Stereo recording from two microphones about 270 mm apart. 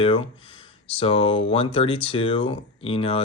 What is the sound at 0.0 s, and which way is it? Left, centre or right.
Speech, centre.